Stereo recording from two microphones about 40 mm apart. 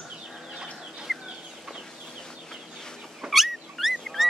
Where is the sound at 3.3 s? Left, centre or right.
Centre.